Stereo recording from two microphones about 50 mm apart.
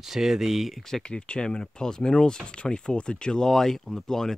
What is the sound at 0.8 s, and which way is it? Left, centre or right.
Speech, centre.